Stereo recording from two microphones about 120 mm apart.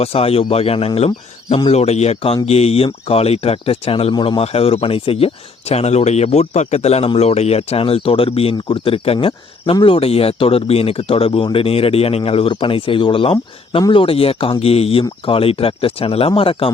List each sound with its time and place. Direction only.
0.0 s speech: 55° left (ahead or behind)